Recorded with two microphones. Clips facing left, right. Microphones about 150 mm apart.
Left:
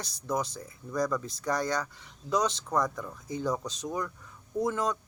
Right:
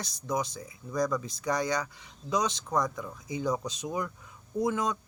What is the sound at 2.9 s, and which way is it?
Speech, 10° right (ahead or behind).